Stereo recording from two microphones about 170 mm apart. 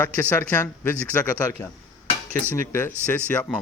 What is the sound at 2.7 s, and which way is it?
Speech, 10° left (ahead or behind).